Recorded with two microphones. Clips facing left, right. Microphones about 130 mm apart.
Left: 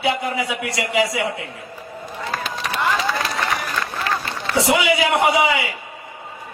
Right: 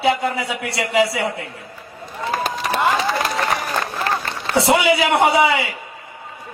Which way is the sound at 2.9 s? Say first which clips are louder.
Right 2 dB; 35° right (ahead or behind).